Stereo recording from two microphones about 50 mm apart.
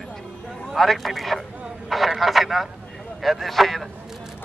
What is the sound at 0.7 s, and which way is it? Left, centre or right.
Speech, centre.